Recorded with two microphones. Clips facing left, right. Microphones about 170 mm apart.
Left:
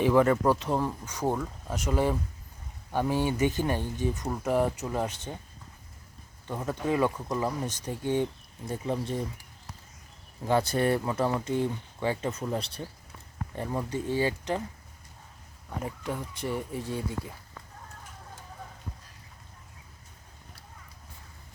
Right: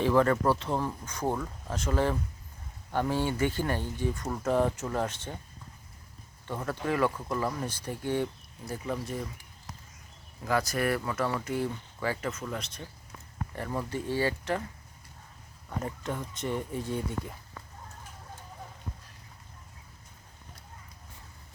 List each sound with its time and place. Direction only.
0.0 s speech: 15° left (ahead or behind)
6.5 s speech: 15° left (ahead or behind)
10.4 s speech: 30° left (ahead or behind)
12.3 s speech: 35° left (ahead or behind)
13.6 s speech: 15° left (ahead or behind)
15.8 s speech: 10° left (ahead or behind)